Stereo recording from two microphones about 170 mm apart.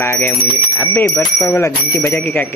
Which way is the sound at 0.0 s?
10° left (ahead or behind).